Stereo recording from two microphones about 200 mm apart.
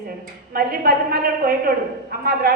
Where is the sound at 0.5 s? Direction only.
50° right (ahead or behind).